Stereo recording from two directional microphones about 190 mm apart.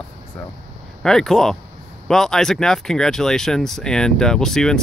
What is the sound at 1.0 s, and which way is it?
Speech, centre (ahead or behind).